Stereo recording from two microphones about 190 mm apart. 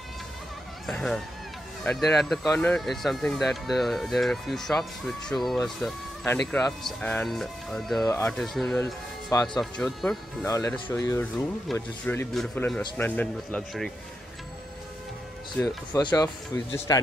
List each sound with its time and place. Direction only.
0.8 s speech: centre (ahead or behind)
8.8 s speech: 20° left (ahead or behind)
9.5 s speech: centre (ahead or behind)
10.4 s speech: 15° left (ahead or behind)
15.6 s speech: 20° left (ahead or behind)